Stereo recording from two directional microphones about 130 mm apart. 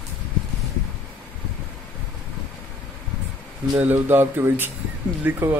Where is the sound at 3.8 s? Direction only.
15° right (ahead or behind).